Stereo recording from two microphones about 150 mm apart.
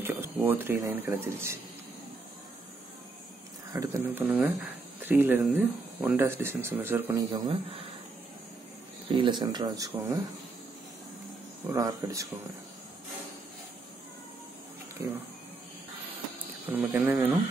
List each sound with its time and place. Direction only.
0.0 s speech: 15° right (ahead or behind)
3.7 s speech: 20° right (ahead or behind)
7.2 s speech: 25° right (ahead or behind)
9.2 s speech: 30° right (ahead or behind)
11.7 s speech: 20° right (ahead or behind)
16.7 s speech: 10° right (ahead or behind)